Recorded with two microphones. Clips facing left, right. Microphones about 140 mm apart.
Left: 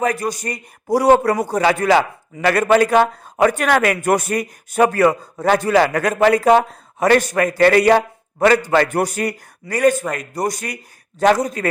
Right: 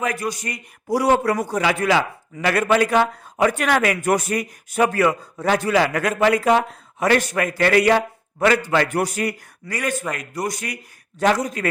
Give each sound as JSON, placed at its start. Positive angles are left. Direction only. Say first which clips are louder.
{"t": 0.0, "sound": "speech", "louder": "left 4 dB", "side_deg": 40}